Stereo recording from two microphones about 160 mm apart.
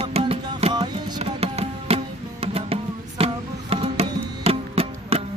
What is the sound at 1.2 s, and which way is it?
Music, 40° right (ahead or behind).